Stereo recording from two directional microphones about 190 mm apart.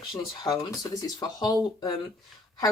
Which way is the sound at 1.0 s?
20° left (ahead or behind).